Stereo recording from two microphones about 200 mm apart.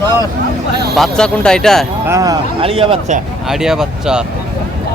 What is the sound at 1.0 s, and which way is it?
Speech, 5° left (ahead or behind).